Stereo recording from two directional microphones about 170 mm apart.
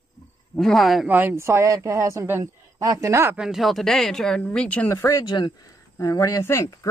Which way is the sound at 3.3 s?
Centre (ahead or behind).